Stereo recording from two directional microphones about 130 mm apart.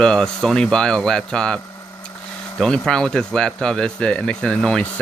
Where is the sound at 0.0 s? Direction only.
5° left (ahead or behind).